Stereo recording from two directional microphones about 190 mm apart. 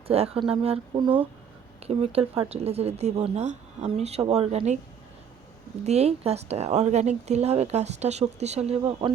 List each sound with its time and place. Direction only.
0.1 s a woman's voice: 30° right (ahead or behind)
5.8 s a woman's voice: 35° right (ahead or behind)